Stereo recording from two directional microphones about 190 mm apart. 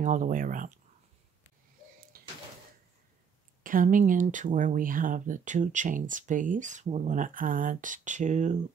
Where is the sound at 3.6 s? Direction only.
45° right (ahead or behind).